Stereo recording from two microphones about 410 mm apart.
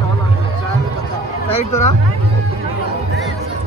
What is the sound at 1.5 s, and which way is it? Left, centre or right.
Speech, centre.